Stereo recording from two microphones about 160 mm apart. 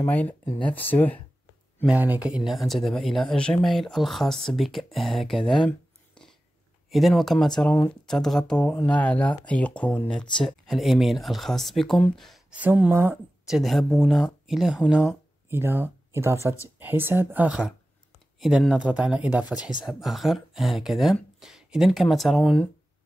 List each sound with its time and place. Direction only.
0.0 s speech: 10° left (ahead or behind)
1.9 s speech: 10° right (ahead or behind)
5.5 s a sound: 5° left (ahead or behind)
6.9 s speech: centre (ahead or behind)
12.5 s speech: 10° right (ahead or behind)
13.5 s speech: centre (ahead or behind)